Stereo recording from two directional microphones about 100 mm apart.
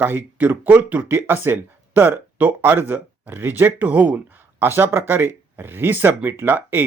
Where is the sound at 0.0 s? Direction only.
15° right (ahead or behind).